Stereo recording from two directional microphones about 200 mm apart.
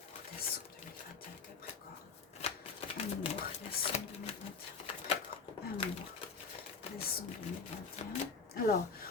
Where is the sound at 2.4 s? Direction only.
30° left (ahead or behind).